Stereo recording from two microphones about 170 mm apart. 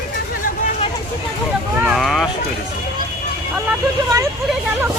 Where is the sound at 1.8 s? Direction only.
Centre (ahead or behind).